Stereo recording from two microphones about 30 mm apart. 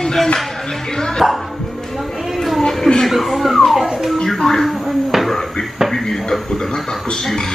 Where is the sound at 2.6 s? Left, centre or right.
Left.